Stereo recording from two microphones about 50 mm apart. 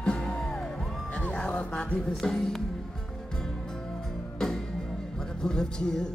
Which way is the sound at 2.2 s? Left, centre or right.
Centre.